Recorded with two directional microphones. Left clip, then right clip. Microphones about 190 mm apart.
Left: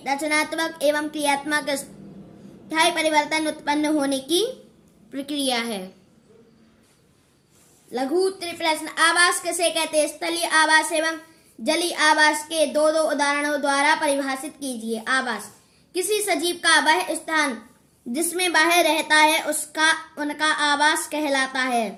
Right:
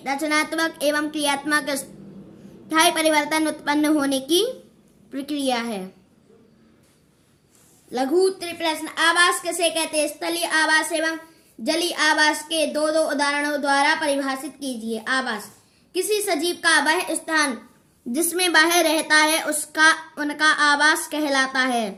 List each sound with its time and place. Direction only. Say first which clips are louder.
0.0 s a woman's voice: even; 20° right (ahead or behind)
7.9 s a woman's voice: right 3 dB; 20° right (ahead or behind)